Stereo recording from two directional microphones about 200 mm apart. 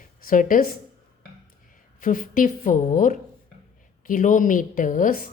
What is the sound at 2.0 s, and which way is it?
Speech, 40° left (ahead or behind).